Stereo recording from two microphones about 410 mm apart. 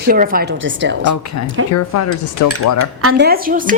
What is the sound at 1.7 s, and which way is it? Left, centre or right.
Speech, left.